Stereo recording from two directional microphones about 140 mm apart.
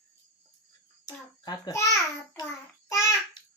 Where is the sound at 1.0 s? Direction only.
30° left (ahead or behind).